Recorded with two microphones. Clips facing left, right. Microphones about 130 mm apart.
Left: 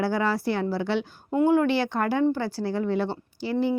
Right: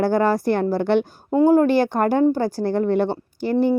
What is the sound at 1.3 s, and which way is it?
Speech, 35° right (ahead or behind).